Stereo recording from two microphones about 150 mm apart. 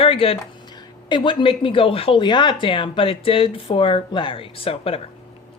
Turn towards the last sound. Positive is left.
turn(degrees=40)  # may be behind; listen again after turning